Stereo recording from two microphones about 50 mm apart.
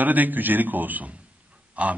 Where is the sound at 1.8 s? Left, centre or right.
Right.